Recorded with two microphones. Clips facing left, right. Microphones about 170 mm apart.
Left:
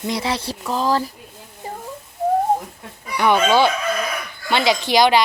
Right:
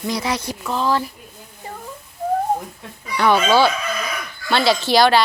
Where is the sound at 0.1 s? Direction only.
25° left (ahead or behind).